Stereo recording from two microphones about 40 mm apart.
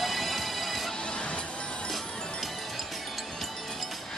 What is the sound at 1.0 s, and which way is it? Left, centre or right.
Music, left.